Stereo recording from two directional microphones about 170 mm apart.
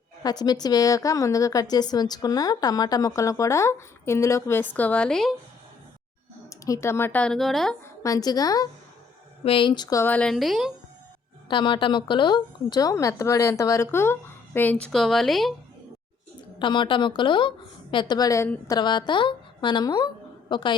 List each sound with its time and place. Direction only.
0.2 s a woman's voice: 25° left (ahead or behind); by 5.3 s 5° left (ahead or behind)
6.5 s a woman's voice: 15° left (ahead or behind); by 7.8 s centre (ahead or behind)
8.0 s a woman's voice: 20° left (ahead or behind)
10.0 s a woman's voice: 10° left (ahead or behind)
11.4 s a woman's voice: 30° left (ahead or behind); by 15.5 s centre (ahead or behind)
16.6 s a woman's voice: 30° left (ahead or behind)
18.7 s a woman's voice: 25° left (ahead or behind)